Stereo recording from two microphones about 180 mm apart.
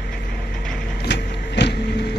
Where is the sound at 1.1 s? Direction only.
70° left (ahead or behind).